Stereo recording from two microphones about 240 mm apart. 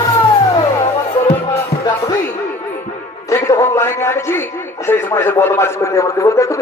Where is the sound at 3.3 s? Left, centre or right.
Centre.